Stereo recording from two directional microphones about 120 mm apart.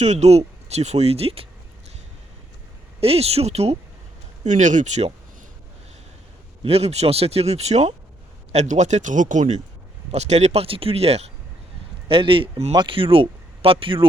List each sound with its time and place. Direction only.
0.0 s speech: 70° right (ahead or behind)
3.0 s speech: 55° right (ahead or behind)
4.4 s speech: 90° right
6.6 s speech: 60° right (ahead or behind)
8.5 s speech: 80° right
10.1 s speech: 65° right (ahead or behind)
12.0 s speech: 45° right (ahead or behind)